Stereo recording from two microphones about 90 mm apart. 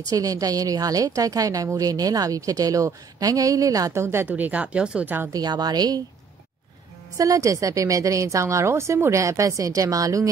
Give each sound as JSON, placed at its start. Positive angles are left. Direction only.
{"t": 0.0, "sound": "a woman's voice", "side_deg": -40}
{"t": 4.3, "sound": "speech", "side_deg": -15}
{"t": 5.3, "sound": "a woman's voice", "side_deg": -45}
{"t": 7.2, "sound": "a woman's voice", "side_deg": -40}